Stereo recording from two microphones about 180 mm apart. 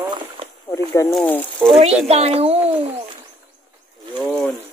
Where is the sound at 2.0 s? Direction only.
35° right (ahead or behind).